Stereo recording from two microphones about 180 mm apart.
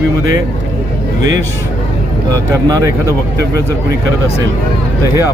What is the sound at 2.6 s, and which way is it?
Speech, 20° right (ahead or behind).